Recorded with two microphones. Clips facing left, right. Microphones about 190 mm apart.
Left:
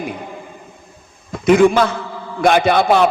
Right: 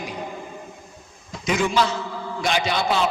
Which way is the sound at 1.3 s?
55° left (ahead or behind).